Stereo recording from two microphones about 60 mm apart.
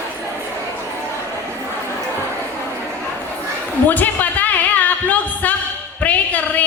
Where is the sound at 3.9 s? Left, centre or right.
Left.